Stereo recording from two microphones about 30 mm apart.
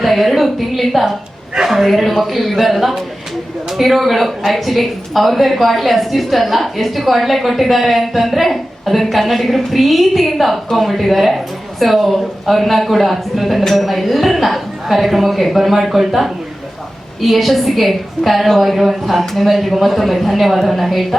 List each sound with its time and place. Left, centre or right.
0.0 s speech: centre